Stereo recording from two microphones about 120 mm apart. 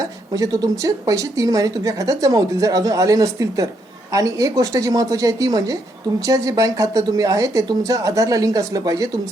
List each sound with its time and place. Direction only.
0.0 s speech: 30° right (ahead or behind)